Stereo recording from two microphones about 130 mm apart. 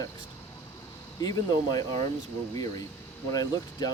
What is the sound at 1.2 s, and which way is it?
Speech, 30° left (ahead or behind).